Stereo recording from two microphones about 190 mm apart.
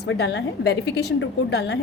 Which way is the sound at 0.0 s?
65° left (ahead or behind).